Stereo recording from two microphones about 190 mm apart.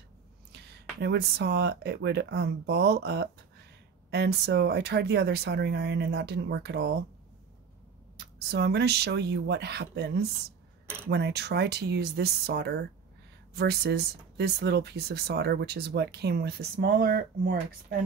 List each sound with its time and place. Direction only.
0.5 s speech: 60° right (ahead or behind)
8.2 s speech: 60° right (ahead or behind)